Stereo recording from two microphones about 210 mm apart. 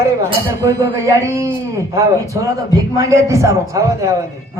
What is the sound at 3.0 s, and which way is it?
A man's voice, 15° right (ahead or behind).